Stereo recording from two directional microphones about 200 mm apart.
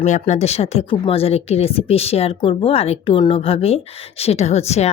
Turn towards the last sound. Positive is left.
turn(degrees=30)  # may be behind; listen again after turning